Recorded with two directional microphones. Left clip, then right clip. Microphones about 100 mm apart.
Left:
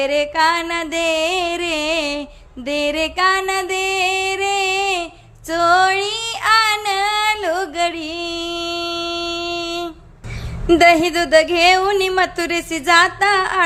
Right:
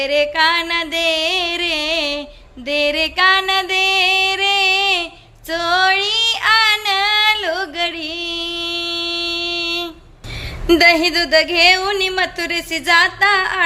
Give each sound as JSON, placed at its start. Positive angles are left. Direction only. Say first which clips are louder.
{"t": 0.0, "sound": "speech", "louder": "right 1 dB", "side_deg": 35}
{"t": 2.6, "sound": "music", "louder": "right 2 dB", "side_deg": 35}
{"t": 5.5, "sound": "child singing", "louder": "left 1 dB", "side_deg": 40}
{"t": 7.4, "sound": "music", "louder": "left 1 dB", "side_deg": 35}
{"t": 10.8, "sound": "speech", "louder": "even", "side_deg": 35}